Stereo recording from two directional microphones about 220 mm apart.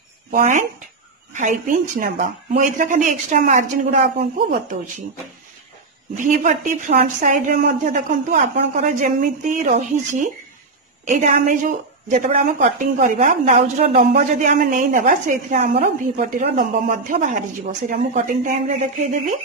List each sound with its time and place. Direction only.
0.3 s a woman's voice: 35° right (ahead or behind)
6.1 s a woman's voice: 35° right (ahead or behind)